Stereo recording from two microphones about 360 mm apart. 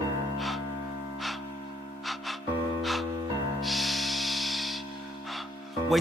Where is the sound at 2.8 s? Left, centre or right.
Centre.